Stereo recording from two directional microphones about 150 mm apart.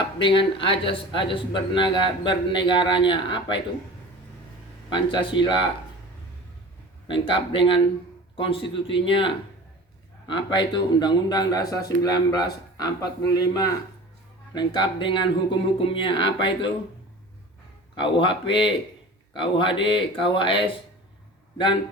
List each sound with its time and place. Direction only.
0.2 s a man's voice: 35° left (ahead or behind)
4.9 s a man's voice: 30° left (ahead or behind)
7.1 s a man's voice: 35° left (ahead or behind)
18.0 s a man's voice: 35° left (ahead or behind)